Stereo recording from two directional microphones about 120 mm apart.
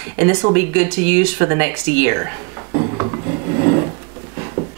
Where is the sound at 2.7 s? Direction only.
30° right (ahead or behind).